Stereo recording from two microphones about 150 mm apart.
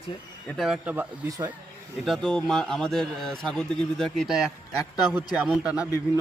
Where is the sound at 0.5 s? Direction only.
Centre (ahead or behind).